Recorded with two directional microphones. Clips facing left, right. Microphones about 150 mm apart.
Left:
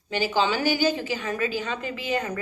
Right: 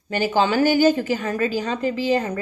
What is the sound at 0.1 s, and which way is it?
A woman's voice, 50° right (ahead or behind).